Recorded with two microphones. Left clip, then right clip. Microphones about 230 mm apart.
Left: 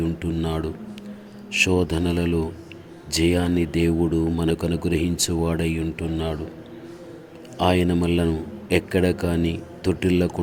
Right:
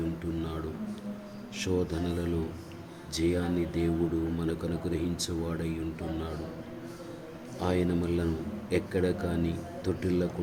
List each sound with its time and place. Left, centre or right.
0.3 s a sound: left
1.5 s speech: left
7.6 s speech: left